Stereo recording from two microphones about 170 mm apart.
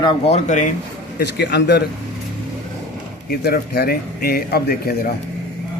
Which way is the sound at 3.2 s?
65° left (ahead or behind).